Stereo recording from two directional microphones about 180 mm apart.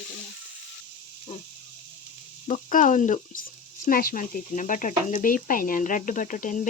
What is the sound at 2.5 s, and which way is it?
Speech, 45° left (ahead or behind).